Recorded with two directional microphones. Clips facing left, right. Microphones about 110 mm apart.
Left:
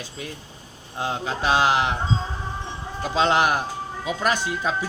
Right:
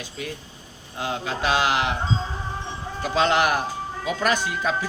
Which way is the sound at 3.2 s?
25° left (ahead or behind).